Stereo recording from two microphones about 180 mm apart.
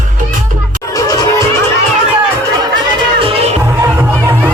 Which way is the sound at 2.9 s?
30° right (ahead or behind).